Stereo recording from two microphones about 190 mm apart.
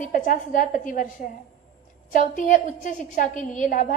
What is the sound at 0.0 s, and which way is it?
A woman's voice, 45° left (ahead or behind).